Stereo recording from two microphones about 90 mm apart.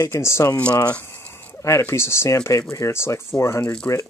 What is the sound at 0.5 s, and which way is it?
Speech, 15° left (ahead or behind).